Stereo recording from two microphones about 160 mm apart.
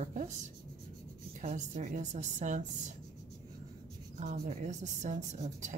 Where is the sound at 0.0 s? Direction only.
50° right (ahead or behind).